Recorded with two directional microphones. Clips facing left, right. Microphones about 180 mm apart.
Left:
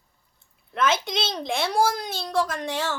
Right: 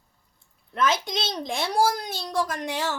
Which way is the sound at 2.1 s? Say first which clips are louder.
Left 2 dB; 15° right (ahead or behind).